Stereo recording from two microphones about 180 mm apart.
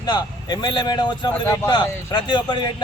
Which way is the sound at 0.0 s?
25° left (ahead or behind).